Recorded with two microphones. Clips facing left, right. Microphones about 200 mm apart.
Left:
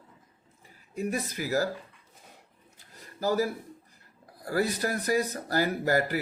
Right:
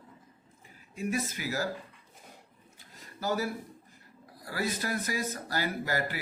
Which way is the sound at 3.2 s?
35° left (ahead or behind).